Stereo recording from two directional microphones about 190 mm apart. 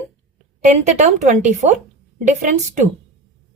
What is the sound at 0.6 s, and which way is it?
A woman's voice, 40° right (ahead or behind).